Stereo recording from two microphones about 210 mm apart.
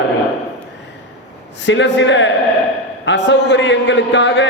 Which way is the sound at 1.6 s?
55° left (ahead or behind).